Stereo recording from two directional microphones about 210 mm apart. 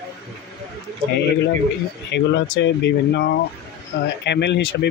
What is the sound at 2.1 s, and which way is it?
Speech, 55° left (ahead or behind).